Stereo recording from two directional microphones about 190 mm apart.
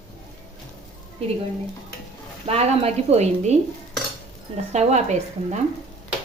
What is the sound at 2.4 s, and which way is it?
A woman's voice, 30° right (ahead or behind).